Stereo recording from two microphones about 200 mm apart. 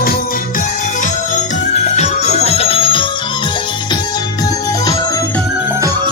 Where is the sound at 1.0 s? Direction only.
35° left (ahead or behind).